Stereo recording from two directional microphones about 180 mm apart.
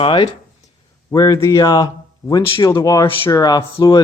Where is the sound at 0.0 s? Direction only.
30° left (ahead or behind).